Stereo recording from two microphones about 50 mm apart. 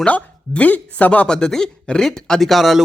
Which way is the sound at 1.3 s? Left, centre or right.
Centre.